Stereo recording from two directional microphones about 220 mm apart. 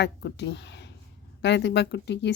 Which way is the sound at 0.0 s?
50° left (ahead or behind).